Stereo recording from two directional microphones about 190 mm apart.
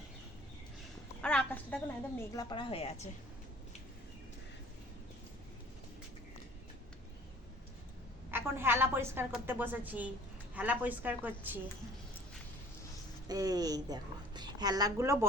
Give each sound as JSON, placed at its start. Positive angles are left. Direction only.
{"t": 1.2, "sound": "a woman's voice", "side_deg": 5}
{"t": 8.3, "sound": "a woman's voice", "side_deg": -10}
{"t": 13.2, "sound": "a woman's voice", "side_deg": -20}